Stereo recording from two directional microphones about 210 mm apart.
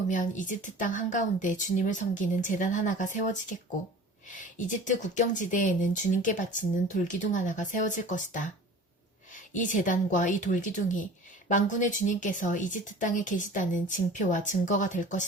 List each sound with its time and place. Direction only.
0.1 s speech: 35° left (ahead or behind)
9.5 s speech: 40° left (ahead or behind)